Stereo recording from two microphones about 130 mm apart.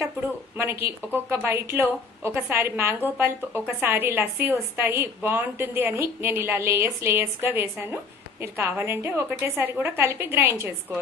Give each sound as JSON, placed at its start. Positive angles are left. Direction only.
{"t": 0.6, "sound": "a woman's voice", "side_deg": -20}